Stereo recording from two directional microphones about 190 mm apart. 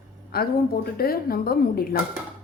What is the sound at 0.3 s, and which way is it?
Speech, 55° left (ahead or behind).